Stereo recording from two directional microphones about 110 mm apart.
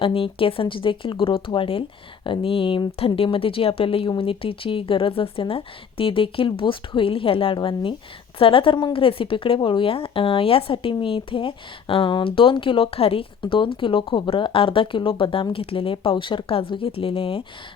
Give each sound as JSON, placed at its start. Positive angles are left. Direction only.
{"t": 0.0, "sound": "a woman's voice", "side_deg": 55}